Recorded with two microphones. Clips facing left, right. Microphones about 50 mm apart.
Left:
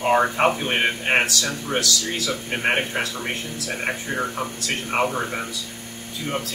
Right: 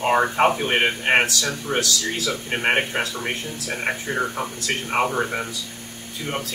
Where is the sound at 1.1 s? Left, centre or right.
Right.